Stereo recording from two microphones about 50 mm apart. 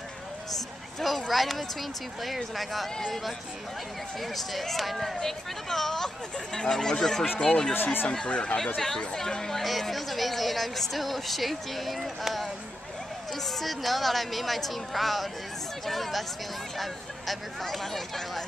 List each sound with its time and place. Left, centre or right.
0.9 s speech: centre
7.7 s speech: left
8.3 s speech: left
8.7 s speech: centre